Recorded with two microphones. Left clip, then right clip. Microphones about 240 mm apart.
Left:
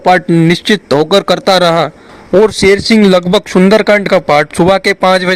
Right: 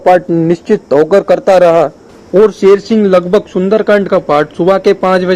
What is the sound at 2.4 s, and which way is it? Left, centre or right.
Speech, left.